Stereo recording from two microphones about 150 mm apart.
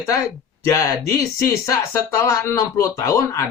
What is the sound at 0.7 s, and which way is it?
Speech, 20° left (ahead or behind).